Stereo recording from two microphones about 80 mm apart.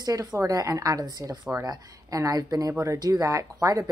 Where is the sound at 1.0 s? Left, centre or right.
Right.